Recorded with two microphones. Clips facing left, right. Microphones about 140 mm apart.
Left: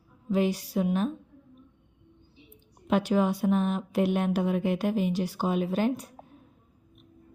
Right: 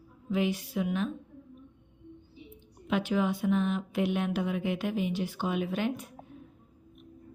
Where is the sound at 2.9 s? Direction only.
40° left (ahead or behind).